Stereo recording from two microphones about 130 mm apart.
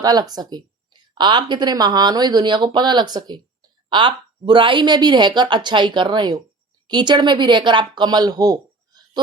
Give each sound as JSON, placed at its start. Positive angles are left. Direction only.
{"t": 0.0, "sound": "speech", "side_deg": -30}